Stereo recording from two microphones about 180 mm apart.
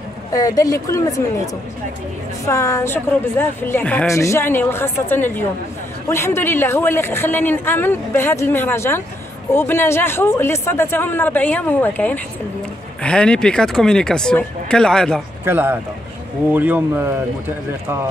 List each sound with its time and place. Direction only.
0.3 s a woman's voice: 20° left (ahead or behind); by 15.2 s 5° left (ahead or behind)
15.4 s speech: 10° right (ahead or behind)